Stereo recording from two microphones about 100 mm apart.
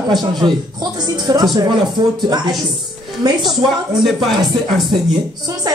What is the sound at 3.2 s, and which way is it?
Speech, 40° right (ahead or behind).